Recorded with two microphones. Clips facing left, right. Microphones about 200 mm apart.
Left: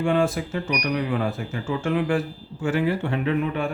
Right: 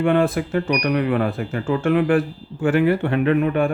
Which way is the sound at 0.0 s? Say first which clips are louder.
Right 4 dB; 55° right (ahead or behind).